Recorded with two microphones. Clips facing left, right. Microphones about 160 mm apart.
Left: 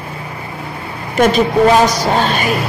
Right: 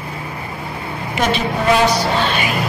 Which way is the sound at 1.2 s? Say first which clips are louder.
Left 8 dB; 45° left (ahead or behind).